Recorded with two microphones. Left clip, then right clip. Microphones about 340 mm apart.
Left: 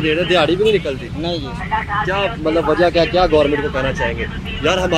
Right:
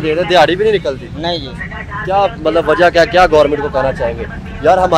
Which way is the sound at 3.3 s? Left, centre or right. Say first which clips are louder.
Right 4 dB; right.